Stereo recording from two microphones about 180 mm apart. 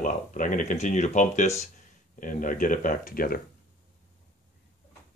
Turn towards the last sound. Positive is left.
turn(degrees=55)  # may be behind; listen again after turning